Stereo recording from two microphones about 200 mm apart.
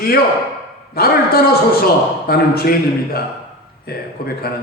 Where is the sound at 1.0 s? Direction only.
50° left (ahead or behind).